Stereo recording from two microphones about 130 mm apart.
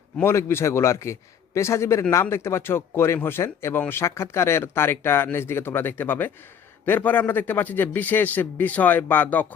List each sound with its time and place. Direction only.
0.2 s a man's voice: 20° left (ahead or behind)